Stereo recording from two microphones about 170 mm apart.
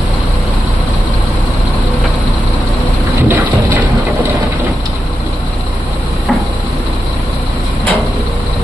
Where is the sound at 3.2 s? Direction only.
10° right (ahead or behind).